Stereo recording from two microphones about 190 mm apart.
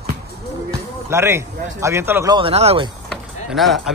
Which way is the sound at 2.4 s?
30° right (ahead or behind).